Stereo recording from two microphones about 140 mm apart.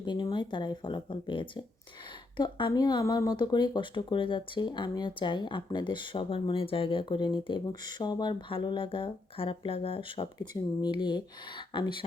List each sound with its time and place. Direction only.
0.0 s speech: 30° left (ahead or behind)